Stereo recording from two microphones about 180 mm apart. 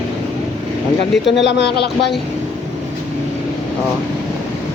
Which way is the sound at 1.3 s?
75° left (ahead or behind).